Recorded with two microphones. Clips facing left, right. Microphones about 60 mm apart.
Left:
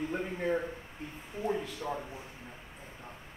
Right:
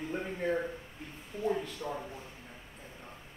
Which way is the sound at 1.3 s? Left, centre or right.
Left.